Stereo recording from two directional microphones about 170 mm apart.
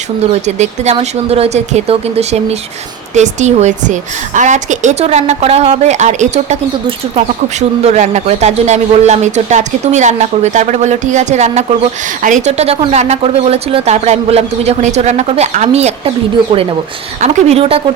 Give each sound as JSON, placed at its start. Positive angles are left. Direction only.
{"t": 0.4, "sound": "speech", "side_deg": -40}
{"t": 7.8, "sound": "speech", "side_deg": -40}